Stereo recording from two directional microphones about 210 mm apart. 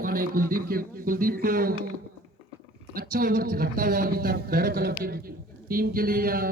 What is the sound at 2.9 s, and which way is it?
A man's voice, 45° right (ahead or behind).